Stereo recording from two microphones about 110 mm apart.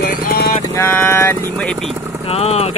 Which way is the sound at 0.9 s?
20° left (ahead or behind).